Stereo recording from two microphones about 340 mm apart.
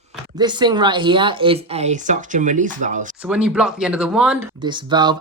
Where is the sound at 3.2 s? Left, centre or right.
Centre.